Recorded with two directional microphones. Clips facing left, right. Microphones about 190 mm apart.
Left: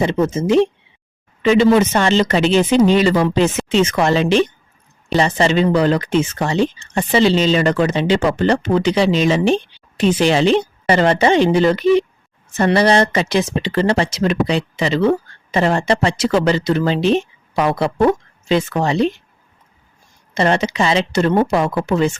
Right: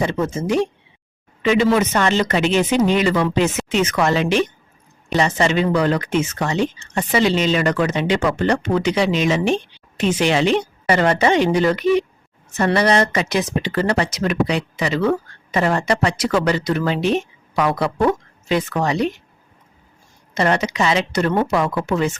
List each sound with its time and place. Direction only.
0.0 s speech: 20° left (ahead or behind)
1.4 s speech: 30° left (ahead or behind)
20.3 s speech: 30° left (ahead or behind)